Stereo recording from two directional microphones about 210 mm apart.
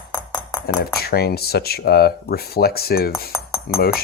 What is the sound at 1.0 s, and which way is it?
Speech, 50° left (ahead or behind).